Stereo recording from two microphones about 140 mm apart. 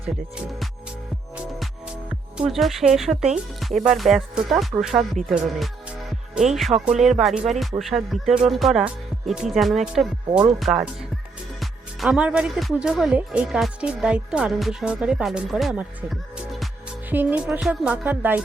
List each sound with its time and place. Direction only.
2.4 s speech: centre (ahead or behind)
6.5 s speech: centre (ahead or behind)
16.0 s music: centre (ahead or behind)
17.1 s speech: 10° right (ahead or behind)